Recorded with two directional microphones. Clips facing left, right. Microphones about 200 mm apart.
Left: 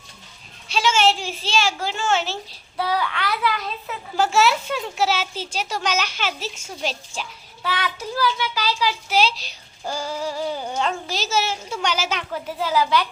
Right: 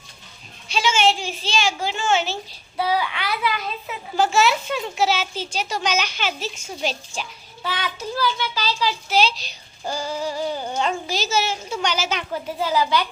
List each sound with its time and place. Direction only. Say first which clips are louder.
0.7 s a child's voice: even; centre (ahead or behind)
3.5 s speech: even; 20° right (ahead or behind)
4.2 s a child's voice: even; 5° left (ahead or behind)